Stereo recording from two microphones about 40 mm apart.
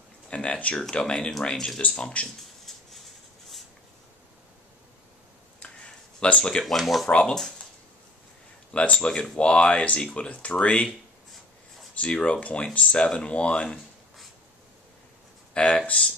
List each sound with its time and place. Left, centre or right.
0.3 s speech: left
0.9 s speech: left
6.2 s speech: left
6.6 s speech: centre
7.1 s speech: left
8.7 s speech: left
10.5 s speech: left
11.9 s speech: left
15.6 s speech: left